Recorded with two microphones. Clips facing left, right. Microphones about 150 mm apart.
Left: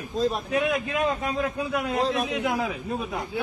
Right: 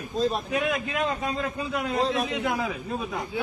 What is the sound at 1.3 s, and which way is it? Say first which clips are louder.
Speech: left 2 dB; centre (ahead or behind).